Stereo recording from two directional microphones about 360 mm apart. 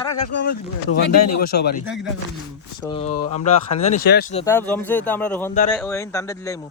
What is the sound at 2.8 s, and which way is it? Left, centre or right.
Speech, centre.